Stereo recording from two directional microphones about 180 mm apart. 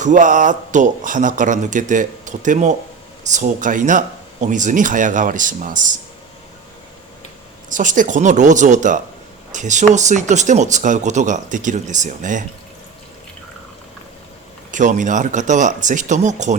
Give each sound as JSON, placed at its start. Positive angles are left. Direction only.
{"t": 0.0, "sound": "speech", "side_deg": -45}
{"t": 7.7, "sound": "speech", "side_deg": -45}
{"t": 14.7, "sound": "speech", "side_deg": -45}